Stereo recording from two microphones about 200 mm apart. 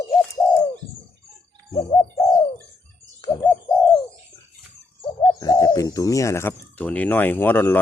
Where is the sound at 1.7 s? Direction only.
25° left (ahead or behind).